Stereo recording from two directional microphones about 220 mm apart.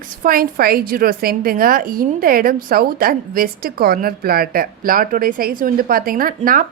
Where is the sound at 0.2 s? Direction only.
40° right (ahead or behind).